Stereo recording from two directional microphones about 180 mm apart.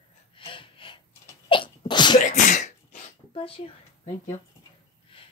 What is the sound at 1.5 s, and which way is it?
Sneeze, 25° left (ahead or behind).